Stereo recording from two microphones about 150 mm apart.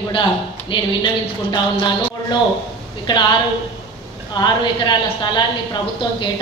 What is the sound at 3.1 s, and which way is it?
Speech, 30° left (ahead or behind).